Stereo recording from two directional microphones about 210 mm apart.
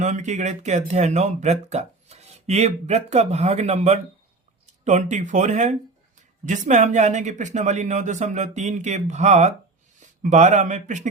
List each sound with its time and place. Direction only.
0.0 s speech: 35° right (ahead or behind)